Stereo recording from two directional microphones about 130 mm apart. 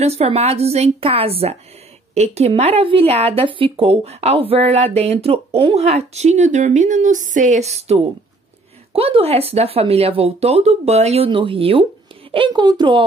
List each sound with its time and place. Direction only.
0.0 s a woman's voice: 55° right (ahead or behind); by 13.0 s 35° right (ahead or behind)